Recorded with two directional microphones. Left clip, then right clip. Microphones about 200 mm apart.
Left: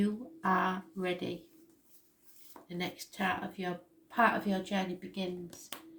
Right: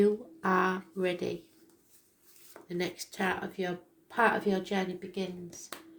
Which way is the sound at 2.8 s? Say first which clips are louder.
Right 2 dB; 40° right (ahead or behind).